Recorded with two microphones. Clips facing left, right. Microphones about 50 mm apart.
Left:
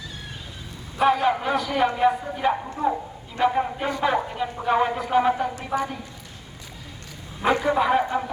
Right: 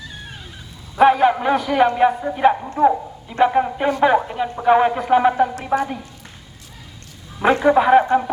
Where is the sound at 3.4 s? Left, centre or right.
Right.